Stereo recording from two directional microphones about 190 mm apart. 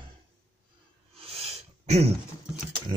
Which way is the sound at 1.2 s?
30° right (ahead or behind).